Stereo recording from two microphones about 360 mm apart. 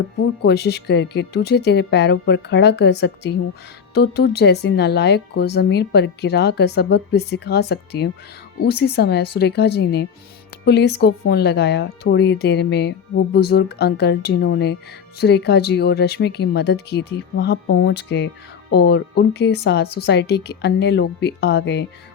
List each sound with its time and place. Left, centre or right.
0.4 s speech: left